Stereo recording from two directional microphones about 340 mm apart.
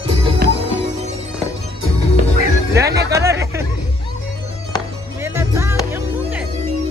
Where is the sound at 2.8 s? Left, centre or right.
Centre.